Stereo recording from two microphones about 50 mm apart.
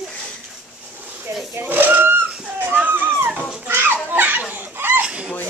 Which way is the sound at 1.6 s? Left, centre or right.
Right.